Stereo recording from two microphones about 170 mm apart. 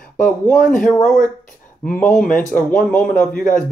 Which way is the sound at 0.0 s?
50° left (ahead or behind).